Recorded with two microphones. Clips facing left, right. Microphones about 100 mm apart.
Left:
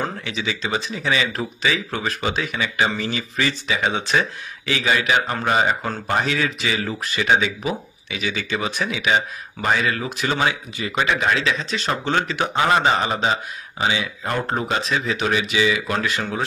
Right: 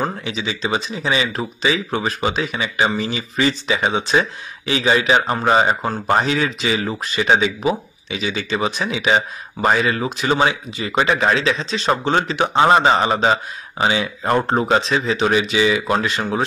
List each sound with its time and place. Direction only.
0.0 s speech: 20° right (ahead or behind)
9.0 s a man's voice: 35° right (ahead or behind)
11.6 s a man's voice: 20° right (ahead or behind)